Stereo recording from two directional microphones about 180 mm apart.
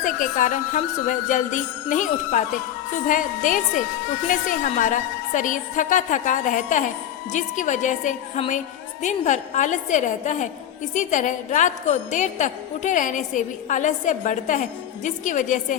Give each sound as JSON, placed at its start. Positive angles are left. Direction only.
{"t": 0.0, "sound": "a woman's voice", "side_deg": 45}